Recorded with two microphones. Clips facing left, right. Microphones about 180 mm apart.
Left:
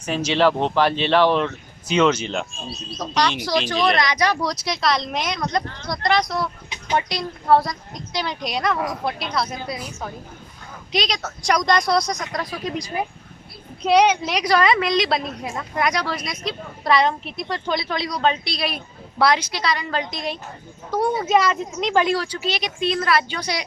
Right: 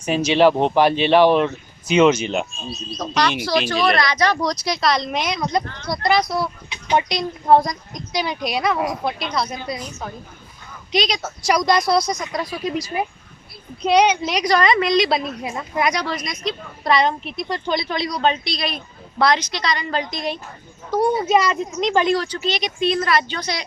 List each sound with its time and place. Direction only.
0.0 s speech: 10° right (ahead or behind)
3.0 s speech: 15° left (ahead or behind)
4.4 s a woman's voice: centre (ahead or behind)
6.9 s a woman's voice: 20° right (ahead or behind); by 23.6 s 10° left (ahead or behind)